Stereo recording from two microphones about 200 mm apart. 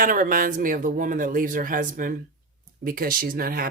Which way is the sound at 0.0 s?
40° right (ahead or behind).